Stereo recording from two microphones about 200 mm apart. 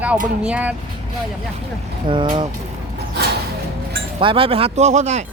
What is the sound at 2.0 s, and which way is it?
Speech, 25° right (ahead or behind).